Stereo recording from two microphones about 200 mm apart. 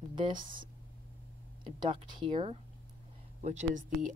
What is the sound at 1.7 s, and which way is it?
Speech, 25° right (ahead or behind).